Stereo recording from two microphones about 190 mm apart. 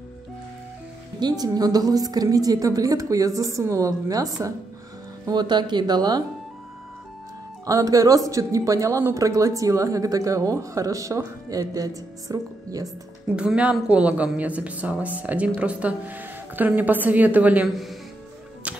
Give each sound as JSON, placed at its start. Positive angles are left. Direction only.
{"t": 1.2, "sound": "a woman's voice", "side_deg": -20}
{"t": 7.6, "sound": "speech", "side_deg": -20}
{"t": 13.4, "sound": "speech", "side_deg": -5}